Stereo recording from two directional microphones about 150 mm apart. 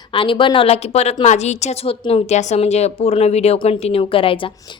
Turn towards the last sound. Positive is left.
turn(degrees=35)  # may be behind; listen again after turning